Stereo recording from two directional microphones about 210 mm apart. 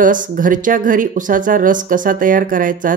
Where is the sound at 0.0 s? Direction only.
40° right (ahead or behind).